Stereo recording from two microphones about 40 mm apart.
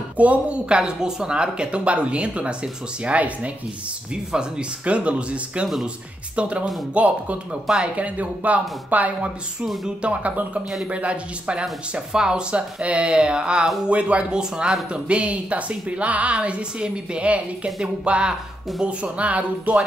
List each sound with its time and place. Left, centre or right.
0.2 s speech: right
0.7 s a woman's voice: right
4.1 s a woman's voice: right
4.8 s a woman's voice: right
12.1 s a woman's voice: centre
14.3 s a woman's voice: centre
14.9 s a woman's voice: right